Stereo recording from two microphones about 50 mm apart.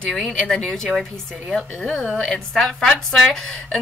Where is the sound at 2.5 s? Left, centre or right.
Centre.